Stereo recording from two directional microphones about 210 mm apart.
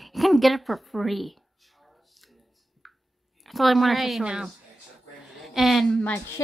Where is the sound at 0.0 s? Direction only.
Centre (ahead or behind).